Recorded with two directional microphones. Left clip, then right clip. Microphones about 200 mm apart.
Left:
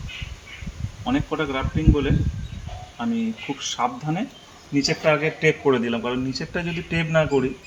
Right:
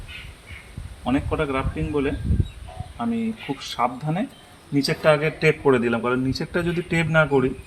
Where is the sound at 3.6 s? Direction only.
30° right (ahead or behind).